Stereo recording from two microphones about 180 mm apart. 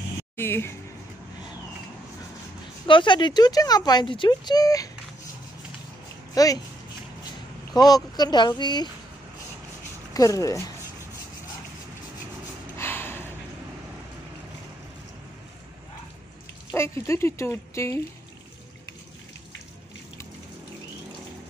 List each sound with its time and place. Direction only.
0.4 s speech: 15° left (ahead or behind)
2.9 s speech: 25° left (ahead or behind)
6.3 s speech: 20° left (ahead or behind)
7.7 s speech: 20° left (ahead or behind)
10.1 s speech: 20° left (ahead or behind)
12.7 s a sound: 10° left (ahead or behind)
16.7 s speech: 15° left (ahead or behind)